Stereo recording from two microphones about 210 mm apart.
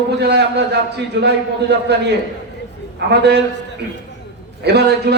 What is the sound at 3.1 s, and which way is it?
Speech, 55° right (ahead or behind).